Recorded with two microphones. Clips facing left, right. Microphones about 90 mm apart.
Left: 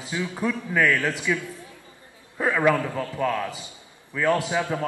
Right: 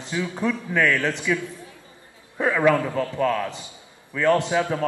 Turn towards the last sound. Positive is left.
turn(degrees=5)  # may be behind; listen again after turning